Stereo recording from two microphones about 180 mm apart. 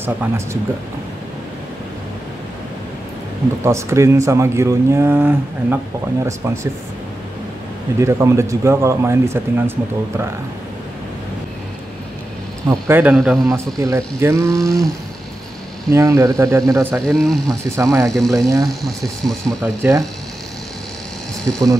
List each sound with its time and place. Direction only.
0.0 s speech: 10° right (ahead or behind)
3.6 s speech: 15° right (ahead or behind)
8.0 s speech: 15° right (ahead or behind)
12.6 s speech: 10° right (ahead or behind)
13.1 s speech: centre (ahead or behind)
13.7 s speech: 15° right (ahead or behind)
14.6 s speech: centre (ahead or behind)
15.9 s speech: 15° right (ahead or behind)
17.0 s speech: 5° left (ahead or behind)
19.6 s speech: 15° right (ahead or behind)
21.5 s speech: 15° right (ahead or behind)